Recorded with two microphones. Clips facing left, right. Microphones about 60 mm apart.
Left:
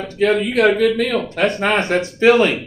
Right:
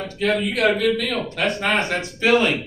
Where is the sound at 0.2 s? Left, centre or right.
Left.